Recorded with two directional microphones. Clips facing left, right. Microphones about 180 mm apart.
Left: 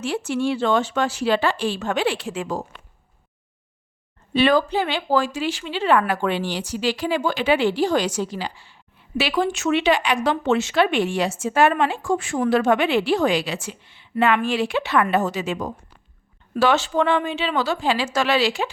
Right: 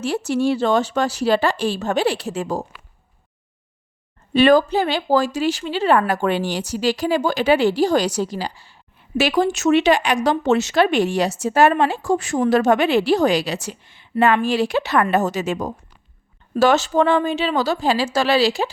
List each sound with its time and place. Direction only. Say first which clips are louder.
0.0 s speech: right 3 dB; 40° right (ahead or behind)
4.4 s speech: right 4 dB; 45° right (ahead or behind)